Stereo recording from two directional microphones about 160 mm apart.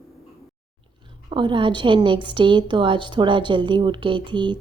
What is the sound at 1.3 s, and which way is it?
A woman's voice, 30° right (ahead or behind).